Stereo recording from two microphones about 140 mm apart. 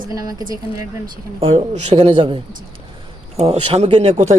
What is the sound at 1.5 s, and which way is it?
Speech, 50° right (ahead or behind).